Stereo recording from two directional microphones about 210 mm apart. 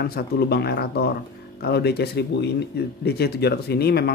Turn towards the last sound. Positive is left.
turn(degrees=50)  # may be behind; listen again after turning